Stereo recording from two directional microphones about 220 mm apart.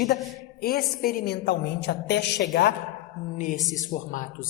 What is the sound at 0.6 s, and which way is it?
A woman's voice, 45° left (ahead or behind).